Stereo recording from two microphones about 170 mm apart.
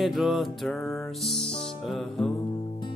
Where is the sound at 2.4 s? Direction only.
25° left (ahead or behind).